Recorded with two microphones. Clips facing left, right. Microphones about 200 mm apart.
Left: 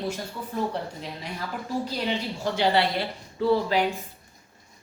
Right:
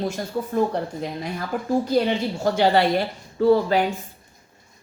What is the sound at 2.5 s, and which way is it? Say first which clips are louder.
Speech: right 4 dB; 50° right (ahead or behind).